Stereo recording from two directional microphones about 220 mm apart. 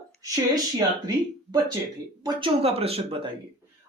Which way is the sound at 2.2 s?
25° right (ahead or behind).